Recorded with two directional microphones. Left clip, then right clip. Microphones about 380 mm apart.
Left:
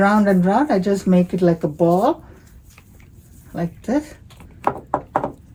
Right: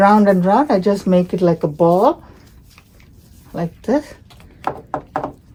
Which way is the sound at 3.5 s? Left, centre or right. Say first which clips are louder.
Right 4 dB; right.